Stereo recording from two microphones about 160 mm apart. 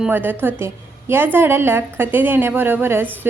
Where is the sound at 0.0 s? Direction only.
10° right (ahead or behind).